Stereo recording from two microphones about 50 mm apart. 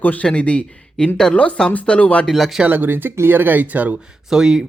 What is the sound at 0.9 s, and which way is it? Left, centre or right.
Speech, centre.